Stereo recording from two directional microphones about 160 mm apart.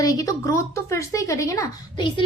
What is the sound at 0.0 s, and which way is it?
A woman's voice, 20° left (ahead or behind).